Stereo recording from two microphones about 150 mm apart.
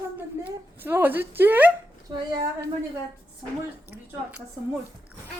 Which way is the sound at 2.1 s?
25° right (ahead or behind).